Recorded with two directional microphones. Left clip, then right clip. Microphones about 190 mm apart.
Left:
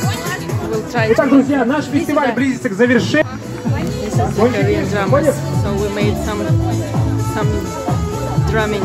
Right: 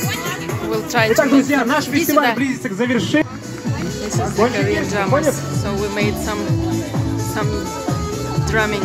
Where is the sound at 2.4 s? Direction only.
45° right (ahead or behind).